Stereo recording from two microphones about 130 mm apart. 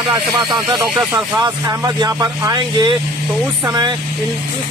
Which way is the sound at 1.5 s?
30° right (ahead or behind).